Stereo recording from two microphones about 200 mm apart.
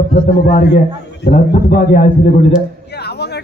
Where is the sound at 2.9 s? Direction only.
55° left (ahead or behind).